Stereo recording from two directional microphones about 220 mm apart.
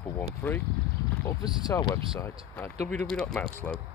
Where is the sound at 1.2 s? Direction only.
15° left (ahead or behind).